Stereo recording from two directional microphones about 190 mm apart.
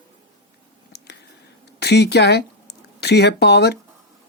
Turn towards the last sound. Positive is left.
turn(degrees=60)  # may be behind; listen again after turning